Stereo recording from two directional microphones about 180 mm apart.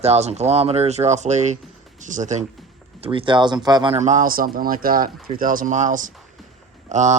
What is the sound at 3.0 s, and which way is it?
Speech, 30° right (ahead or behind).